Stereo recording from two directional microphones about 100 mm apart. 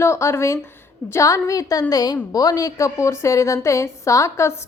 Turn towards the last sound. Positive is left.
turn(degrees=30)  # may be behind; listen again after turning